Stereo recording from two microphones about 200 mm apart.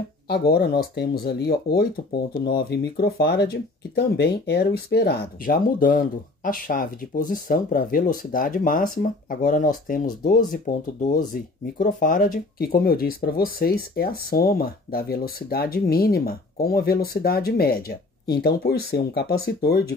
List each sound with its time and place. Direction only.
0.3 s speech: 50° left (ahead or behind)